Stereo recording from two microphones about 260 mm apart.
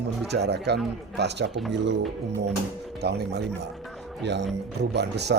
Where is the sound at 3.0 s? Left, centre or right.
Right.